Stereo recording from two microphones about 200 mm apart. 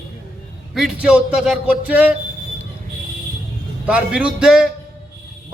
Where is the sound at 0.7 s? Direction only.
5° right (ahead or behind).